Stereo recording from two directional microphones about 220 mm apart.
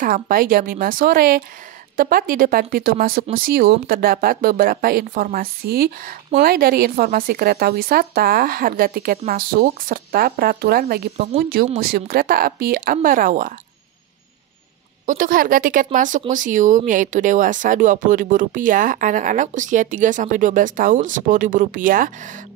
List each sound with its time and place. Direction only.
0.0 s speech: 40° right (ahead or behind)
15.0 s speech: 40° right (ahead or behind)